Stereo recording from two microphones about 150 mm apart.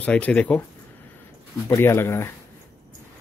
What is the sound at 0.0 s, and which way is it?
Speech, 10° left (ahead or behind).